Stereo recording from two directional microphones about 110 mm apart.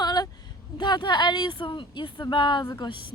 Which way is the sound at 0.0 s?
40° left (ahead or behind).